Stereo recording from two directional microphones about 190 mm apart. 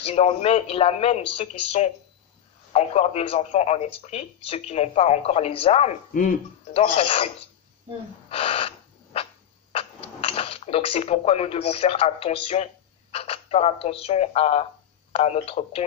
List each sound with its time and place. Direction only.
0.0 s speech: 30° left (ahead or behind)
8.3 s owl: 30° left (ahead or behind)
13.1 s speech: 30° left (ahead or behind)